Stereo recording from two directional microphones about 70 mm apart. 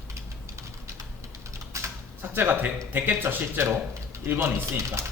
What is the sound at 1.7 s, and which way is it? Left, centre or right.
Typing, right.